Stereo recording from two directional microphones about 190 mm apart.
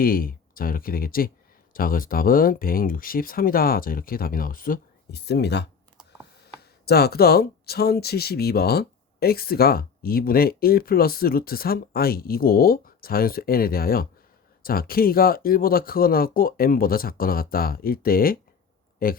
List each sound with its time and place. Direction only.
0.0 s speech: 50° left (ahead or behind)
6.8 s speech: 55° left (ahead or behind)